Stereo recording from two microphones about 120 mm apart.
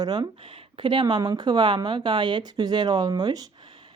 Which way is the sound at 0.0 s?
40° right (ahead or behind).